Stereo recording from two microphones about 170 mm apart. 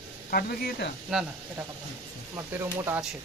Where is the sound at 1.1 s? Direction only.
5° right (ahead or behind).